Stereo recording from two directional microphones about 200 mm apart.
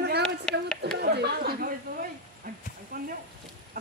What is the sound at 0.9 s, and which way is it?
Speech, 55° right (ahead or behind).